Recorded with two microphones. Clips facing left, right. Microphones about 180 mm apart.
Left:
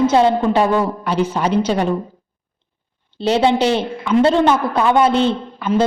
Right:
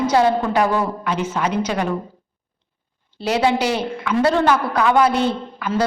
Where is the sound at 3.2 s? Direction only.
25° left (ahead or behind).